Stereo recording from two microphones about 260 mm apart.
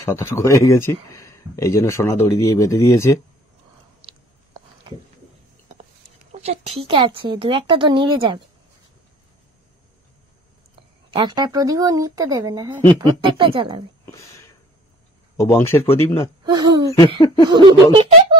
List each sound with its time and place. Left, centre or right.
0.0 s speech: centre
6.3 s speech: right
11.1 s speech: centre
14.0 s a sound: centre
15.3 s speech: centre
16.4 s speech: centre